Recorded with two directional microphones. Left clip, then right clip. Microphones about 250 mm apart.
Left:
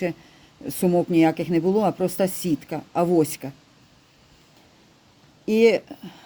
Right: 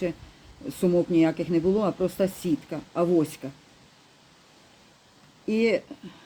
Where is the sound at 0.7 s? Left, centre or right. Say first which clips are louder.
Left 2 dB; left.